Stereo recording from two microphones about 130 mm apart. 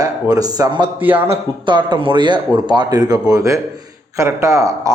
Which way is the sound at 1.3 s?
35° right (ahead or behind).